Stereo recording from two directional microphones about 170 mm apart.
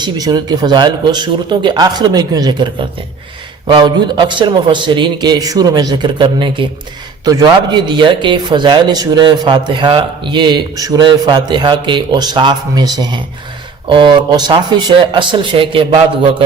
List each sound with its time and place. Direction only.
0.0 s speech: 25° right (ahead or behind)